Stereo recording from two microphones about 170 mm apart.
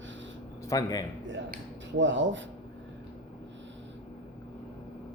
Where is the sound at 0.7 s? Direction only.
20° left (ahead or behind).